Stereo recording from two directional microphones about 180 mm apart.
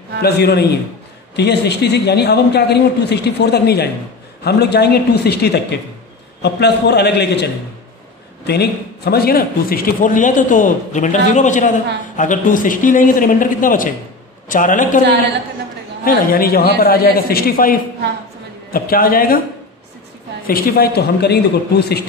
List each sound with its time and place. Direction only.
0.2 s a man's voice: 65° left (ahead or behind)
8.5 s a man's voice: 65° left (ahead or behind); by 15.0 s 45° left (ahead or behind)
16.0 s a man's voice: 55° left (ahead or behind)
20.4 s a man's voice: 55° left (ahead or behind)